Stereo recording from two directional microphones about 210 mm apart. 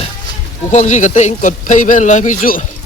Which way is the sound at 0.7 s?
35° left (ahead or behind).